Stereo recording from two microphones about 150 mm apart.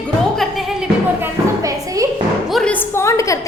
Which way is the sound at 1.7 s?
20° right (ahead or behind).